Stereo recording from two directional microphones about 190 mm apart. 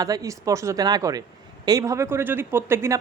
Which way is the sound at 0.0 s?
20° right (ahead or behind).